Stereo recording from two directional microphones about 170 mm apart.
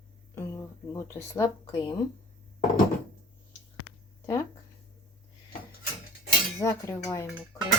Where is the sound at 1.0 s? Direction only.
15° left (ahead or behind).